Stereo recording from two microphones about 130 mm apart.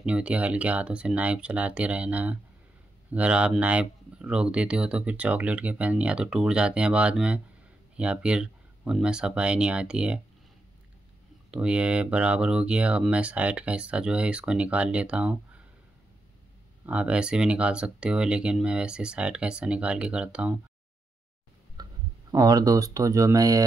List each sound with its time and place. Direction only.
0.0 s speech: 10° right (ahead or behind)
11.5 s speech: 10° right (ahead or behind)
16.8 s speech: 10° right (ahead or behind)
21.8 s a sound: 30° right (ahead or behind)
22.3 s speech: 30° right (ahead or behind)